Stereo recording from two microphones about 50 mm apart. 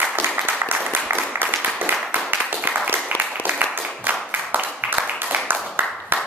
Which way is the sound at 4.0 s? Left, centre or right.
Right.